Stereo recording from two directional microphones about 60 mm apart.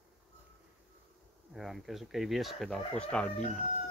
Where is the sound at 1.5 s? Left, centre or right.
Centre.